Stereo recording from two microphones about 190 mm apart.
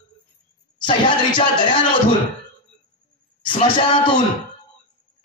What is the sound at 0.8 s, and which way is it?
Speech, 25° left (ahead or behind).